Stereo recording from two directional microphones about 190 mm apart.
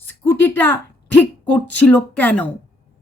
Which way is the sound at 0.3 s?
10° left (ahead or behind).